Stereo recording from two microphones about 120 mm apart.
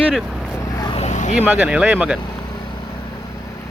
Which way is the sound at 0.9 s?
70° left (ahead or behind).